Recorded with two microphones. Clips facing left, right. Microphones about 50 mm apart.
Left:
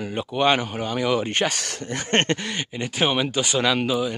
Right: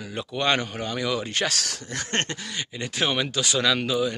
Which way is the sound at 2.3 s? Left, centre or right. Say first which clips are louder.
Left 9 dB; left.